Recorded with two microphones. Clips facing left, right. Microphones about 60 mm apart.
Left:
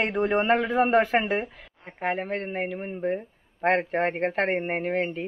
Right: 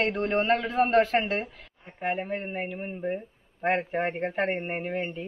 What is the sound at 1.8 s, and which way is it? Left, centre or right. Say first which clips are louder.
Speech: left 2 dB; left.